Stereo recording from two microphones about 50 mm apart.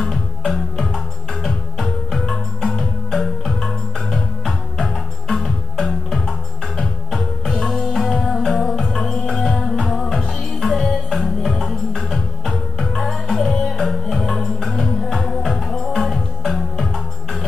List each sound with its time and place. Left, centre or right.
0.5 s music: centre